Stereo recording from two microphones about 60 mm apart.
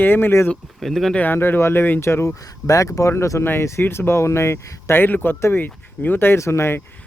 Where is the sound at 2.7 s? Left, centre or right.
Left.